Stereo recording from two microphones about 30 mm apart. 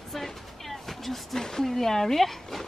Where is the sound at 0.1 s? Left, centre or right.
Centre.